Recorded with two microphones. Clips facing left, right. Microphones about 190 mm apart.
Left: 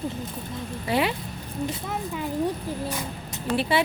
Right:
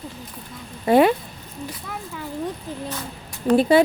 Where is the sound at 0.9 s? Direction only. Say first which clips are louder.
Right 9 dB; 50° right (ahead or behind).